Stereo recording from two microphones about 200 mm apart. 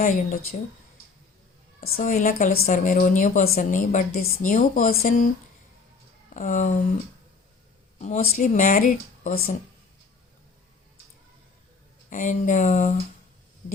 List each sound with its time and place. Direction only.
0.0 s a woman's voice: 45° left (ahead or behind)
1.8 s a woman's voice: 45° left (ahead or behind)
6.3 s a woman's voice: 40° left (ahead or behind)
7.9 s a woman's voice: 40° left (ahead or behind)
12.1 s a woman's voice: 40° left (ahead or behind)